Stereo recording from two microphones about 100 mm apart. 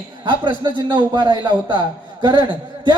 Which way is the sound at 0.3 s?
50° right (ahead or behind).